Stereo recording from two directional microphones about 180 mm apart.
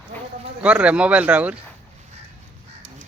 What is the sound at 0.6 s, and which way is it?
Speech, 5° right (ahead or behind).